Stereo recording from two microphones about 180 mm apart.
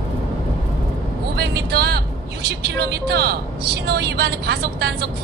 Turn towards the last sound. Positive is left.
turn(degrees=-65)  # may be behind; listen again after turning